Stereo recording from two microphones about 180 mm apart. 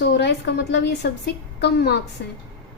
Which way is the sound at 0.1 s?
70° left (ahead or behind).